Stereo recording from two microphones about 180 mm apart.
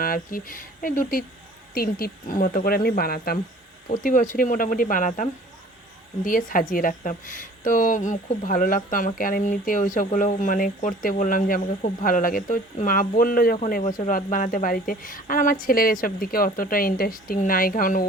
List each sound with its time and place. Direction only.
0.0 s a woman's voice: 55° left (ahead or behind)